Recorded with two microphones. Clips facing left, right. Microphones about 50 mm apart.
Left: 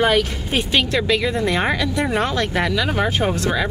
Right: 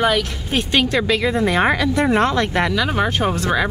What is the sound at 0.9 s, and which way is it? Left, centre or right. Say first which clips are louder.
Speech: right 1 dB; centre.